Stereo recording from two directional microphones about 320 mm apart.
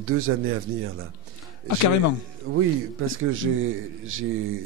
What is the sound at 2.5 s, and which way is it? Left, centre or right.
A man's voice, right.